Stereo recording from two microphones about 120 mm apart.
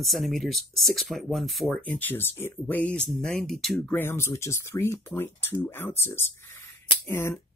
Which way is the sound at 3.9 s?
20° left (ahead or behind).